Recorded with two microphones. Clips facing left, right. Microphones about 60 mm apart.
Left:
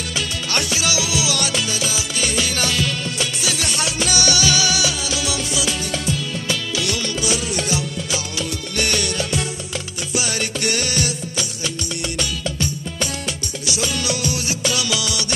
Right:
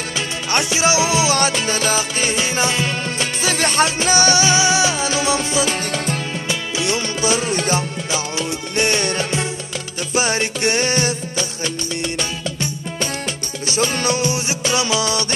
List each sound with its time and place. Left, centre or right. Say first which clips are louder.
0.5 s music: right 6 dB; right
6.5 s music: right 2 dB; right
13.7 s music: right 4 dB; right